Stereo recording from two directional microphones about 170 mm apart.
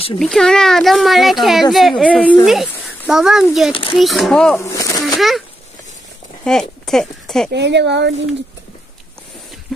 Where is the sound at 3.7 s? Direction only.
30° left (ahead or behind).